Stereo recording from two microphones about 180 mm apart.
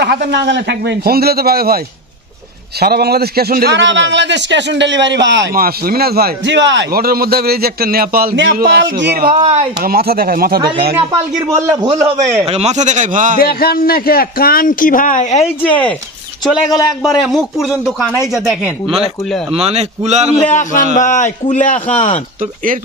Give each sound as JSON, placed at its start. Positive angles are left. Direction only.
{"t": 0.0, "sound": "a man's voice", "side_deg": -70}
{"t": 2.8, "sound": "a man's voice", "side_deg": -60}
{"t": 5.5, "sound": "a man's voice", "side_deg": -55}
{"t": 6.9, "sound": "a man's voice", "side_deg": -55}
{"t": 9.3, "sound": "speech", "side_deg": -30}
{"t": 9.8, "sound": "a man's voice", "side_deg": -55}
{"t": 11.9, "sound": "a man's voice", "side_deg": -15}
{"t": 12.4, "sound": "a man's voice", "side_deg": -35}
{"t": 13.4, "sound": "a man's voice", "side_deg": 55}
{"t": 17.2, "sound": "speech", "side_deg": 0}
{"t": 19.5, "sound": "a man's voice", "side_deg": -35}
{"t": 20.4, "sound": "a man's voice", "side_deg": 45}